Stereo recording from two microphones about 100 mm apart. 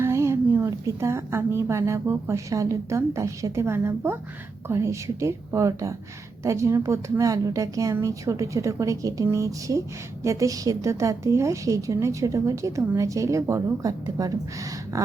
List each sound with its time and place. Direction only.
0.0 s a woman's voice: 25° right (ahead or behind)